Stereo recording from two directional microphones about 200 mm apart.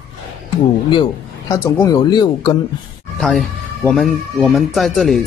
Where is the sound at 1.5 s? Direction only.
15° left (ahead or behind).